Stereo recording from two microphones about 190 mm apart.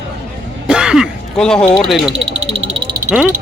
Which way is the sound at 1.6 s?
5° left (ahead or behind).